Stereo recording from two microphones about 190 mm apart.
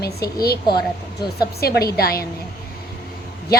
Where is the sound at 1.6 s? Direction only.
55° left (ahead or behind).